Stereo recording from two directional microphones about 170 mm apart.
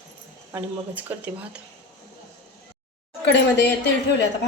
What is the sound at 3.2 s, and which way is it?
Speech, 85° left.